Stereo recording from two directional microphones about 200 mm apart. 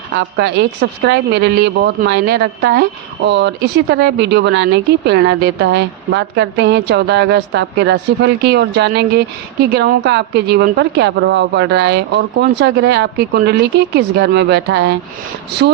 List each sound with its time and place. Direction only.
0.2 s speech: 60° right (ahead or behind)